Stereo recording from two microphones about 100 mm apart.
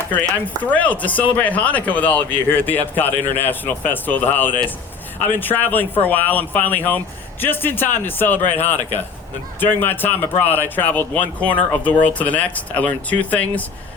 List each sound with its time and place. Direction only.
0.4 s speech: 15° left (ahead or behind)
9.6 s speech: 20° left (ahead or behind)